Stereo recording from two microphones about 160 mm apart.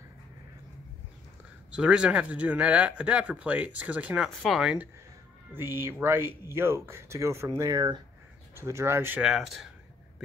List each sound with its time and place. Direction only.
1.7 s speech: 5° right (ahead or behind)
5.5 s speech: 15° right (ahead or behind)